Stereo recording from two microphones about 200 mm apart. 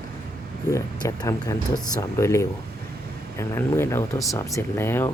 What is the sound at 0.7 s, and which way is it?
Speech, 15° left (ahead or behind).